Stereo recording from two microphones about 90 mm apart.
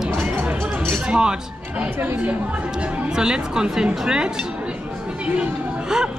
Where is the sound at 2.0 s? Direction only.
25° right (ahead or behind).